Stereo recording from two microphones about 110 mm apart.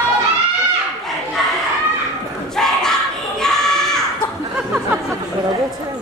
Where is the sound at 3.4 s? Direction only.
5° left (ahead or behind).